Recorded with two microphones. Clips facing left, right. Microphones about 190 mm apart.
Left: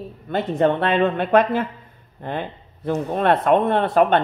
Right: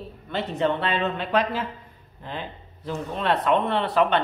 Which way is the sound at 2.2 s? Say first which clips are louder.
Left 7 dB; 55° left (ahead or behind).